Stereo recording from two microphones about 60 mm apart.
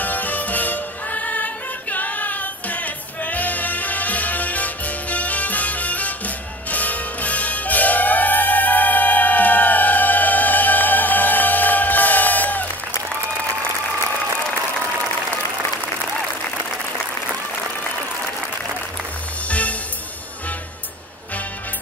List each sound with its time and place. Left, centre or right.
0.0 s music: left